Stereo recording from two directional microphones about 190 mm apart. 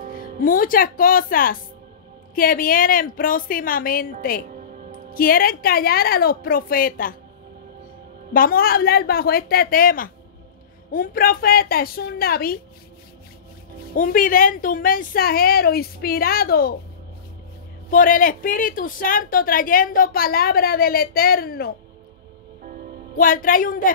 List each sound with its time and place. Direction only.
0.1 s a woman's voice: 45° left (ahead or behind)
4.5 s music: 45° right (ahead or behind)
5.1 s a woman's voice: 50° left (ahead or behind)
8.3 s a woman's voice: 50° left (ahead or behind)
13.9 s a woman's voice: 45° left (ahead or behind)
17.8 s a woman's voice: 45° left (ahead or behind)
23.1 s a woman's voice: 45° left (ahead or behind)